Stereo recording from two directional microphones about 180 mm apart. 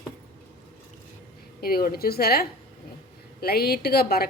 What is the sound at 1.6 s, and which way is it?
A woman's voice, 55° left (ahead or behind).